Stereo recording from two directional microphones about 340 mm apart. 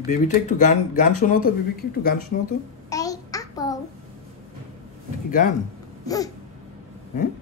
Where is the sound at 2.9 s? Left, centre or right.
Centre.